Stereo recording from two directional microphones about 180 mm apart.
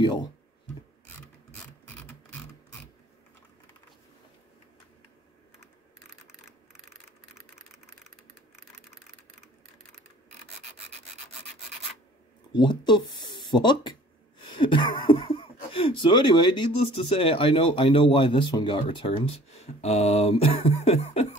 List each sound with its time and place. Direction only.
0.0 s speech: 25° left (ahead or behind)
12.5 s speech: 25° left (ahead or behind)
14.4 s a sound: 25° left (ahead or behind)
15.7 s speech: 30° left (ahead or behind)